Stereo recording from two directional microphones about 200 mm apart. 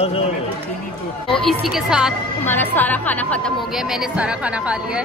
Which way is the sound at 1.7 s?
Centre (ahead or behind).